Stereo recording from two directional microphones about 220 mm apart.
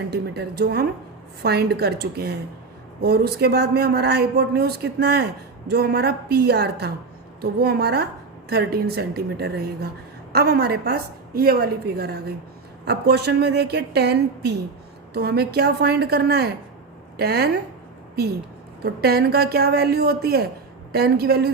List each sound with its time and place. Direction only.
0.1 s speech: 45° right (ahead or behind)
18.8 s speech: 45° right (ahead or behind)